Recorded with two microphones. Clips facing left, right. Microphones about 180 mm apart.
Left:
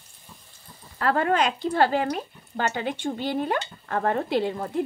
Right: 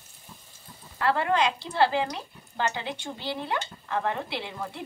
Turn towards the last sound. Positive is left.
turn(degrees=45)  # may be behind; listen again after turning